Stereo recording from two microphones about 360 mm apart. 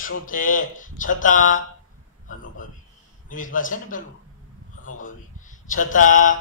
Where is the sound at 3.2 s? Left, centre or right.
Left.